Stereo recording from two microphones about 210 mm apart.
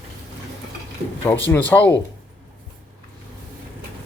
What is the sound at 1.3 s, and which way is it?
Speech, 10° left (ahead or behind).